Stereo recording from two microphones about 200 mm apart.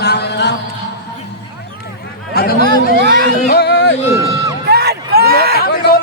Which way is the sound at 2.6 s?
60° right (ahead or behind).